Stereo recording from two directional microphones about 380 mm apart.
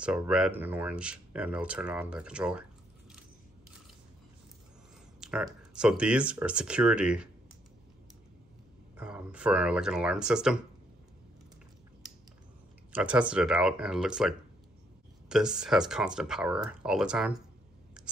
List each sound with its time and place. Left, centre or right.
0.0 s speech: centre
5.2 s speech: centre
8.9 s speech: centre
12.9 s speech: centre